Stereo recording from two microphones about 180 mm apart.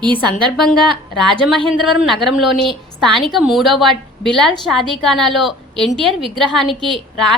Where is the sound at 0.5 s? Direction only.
Centre (ahead or behind).